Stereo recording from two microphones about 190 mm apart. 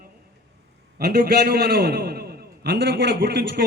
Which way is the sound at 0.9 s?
55° right (ahead or behind).